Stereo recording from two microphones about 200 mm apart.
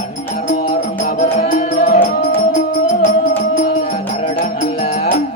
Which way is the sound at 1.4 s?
45° left (ahead or behind).